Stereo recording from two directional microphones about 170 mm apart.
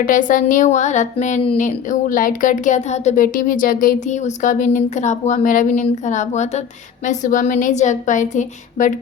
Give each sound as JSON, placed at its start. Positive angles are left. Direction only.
{"t": 0.0, "sound": "speech", "side_deg": 50}